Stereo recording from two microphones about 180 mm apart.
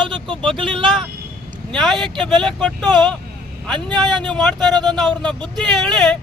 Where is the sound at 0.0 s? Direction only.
25° right (ahead or behind).